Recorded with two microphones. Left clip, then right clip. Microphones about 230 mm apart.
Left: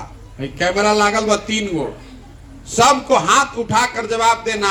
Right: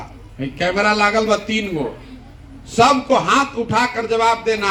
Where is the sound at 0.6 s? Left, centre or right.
Left.